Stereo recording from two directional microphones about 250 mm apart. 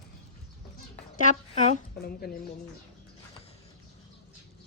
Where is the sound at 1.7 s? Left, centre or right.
Left.